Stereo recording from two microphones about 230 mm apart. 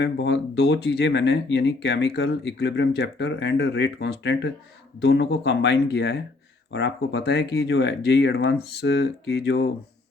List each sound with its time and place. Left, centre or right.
0.0 s speech: left